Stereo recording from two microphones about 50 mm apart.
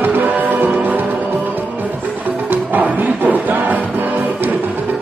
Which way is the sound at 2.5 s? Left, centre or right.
Right.